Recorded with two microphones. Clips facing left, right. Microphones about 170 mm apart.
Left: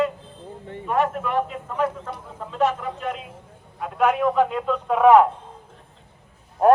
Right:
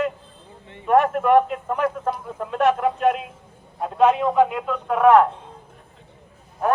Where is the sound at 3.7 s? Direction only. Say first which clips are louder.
Right 3 dB; 25° right (ahead or behind).